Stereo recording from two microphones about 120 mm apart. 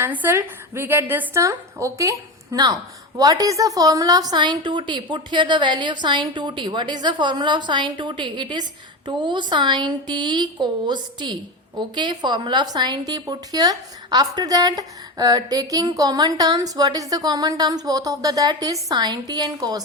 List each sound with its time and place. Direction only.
0.0 s a woman's voice: 15° right (ahead or behind); by 19.8 s 35° right (ahead or behind)